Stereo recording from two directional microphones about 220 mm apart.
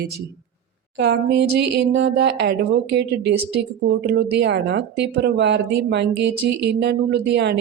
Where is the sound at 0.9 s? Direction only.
50° right (ahead or behind).